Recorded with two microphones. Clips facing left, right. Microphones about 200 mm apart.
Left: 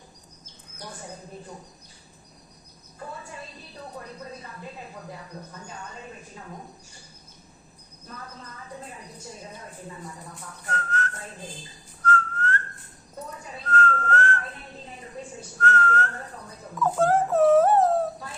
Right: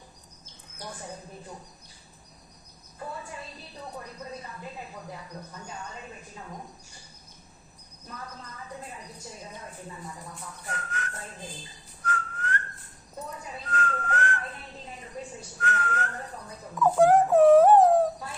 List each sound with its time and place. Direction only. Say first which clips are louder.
10.7 s whistling: left 6 dB; 15° right (ahead or behind)
13.7 s whistling: left 6 dB; 15° right (ahead or behind)
15.6 s whistling: left 6 dB; 15° right (ahead or behind)
16.8 s dog: right 3 dB; 15° right (ahead or behind)